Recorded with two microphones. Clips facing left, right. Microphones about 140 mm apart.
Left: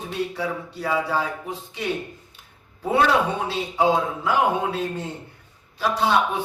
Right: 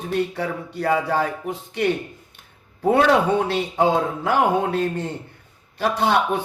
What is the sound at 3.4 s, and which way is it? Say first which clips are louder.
Speech: right 1 dB; 60° right (ahead or behind).